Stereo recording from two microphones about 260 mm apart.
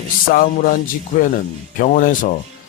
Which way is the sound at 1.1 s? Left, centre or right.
Left.